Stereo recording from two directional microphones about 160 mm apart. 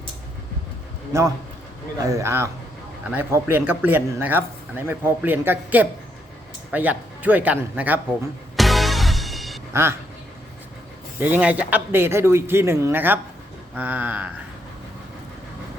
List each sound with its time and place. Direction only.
1.1 s speech: 15° right (ahead or behind)
8.5 s music: centre (ahead or behind)
11.2 s speech: 10° right (ahead or behind)